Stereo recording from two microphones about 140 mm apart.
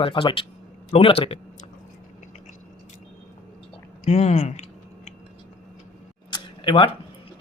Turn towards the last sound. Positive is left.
turn(degrees=35)  # may be behind; listen again after turning